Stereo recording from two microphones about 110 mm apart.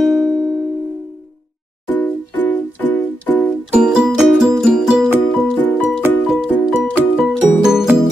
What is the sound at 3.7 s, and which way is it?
Music, 5° right (ahead or behind).